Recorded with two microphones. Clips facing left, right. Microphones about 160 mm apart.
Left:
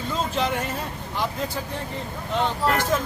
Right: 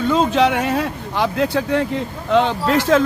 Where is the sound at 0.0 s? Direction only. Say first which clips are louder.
Right 10 dB; 80° right.